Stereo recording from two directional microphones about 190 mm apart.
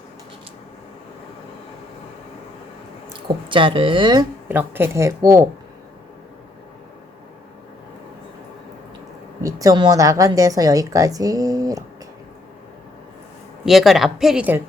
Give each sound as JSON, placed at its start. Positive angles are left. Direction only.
{"t": 3.2, "sound": "a woman's voice", "side_deg": -25}
{"t": 4.4, "sound": "speech", "side_deg": -10}
{"t": 9.4, "sound": "a woman's voice", "side_deg": -20}
{"t": 13.7, "sound": "a woman's voice", "side_deg": 0}